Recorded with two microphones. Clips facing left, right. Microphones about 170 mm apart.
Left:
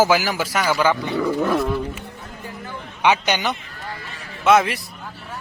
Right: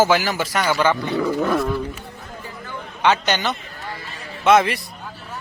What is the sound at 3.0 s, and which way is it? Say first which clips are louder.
Speech: even; 15° left (ahead or behind).